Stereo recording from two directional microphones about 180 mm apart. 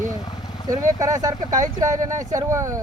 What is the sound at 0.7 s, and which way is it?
Speech, 20° right (ahead or behind).